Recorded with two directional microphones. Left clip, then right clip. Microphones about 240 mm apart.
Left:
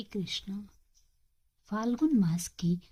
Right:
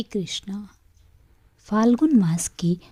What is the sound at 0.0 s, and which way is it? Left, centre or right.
Speech, right.